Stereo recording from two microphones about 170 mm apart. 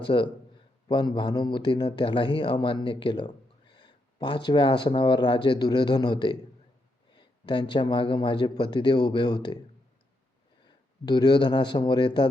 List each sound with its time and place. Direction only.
0.0 s a man's voice: 30° left (ahead or behind)
10.7 s speech: 25° left (ahead or behind)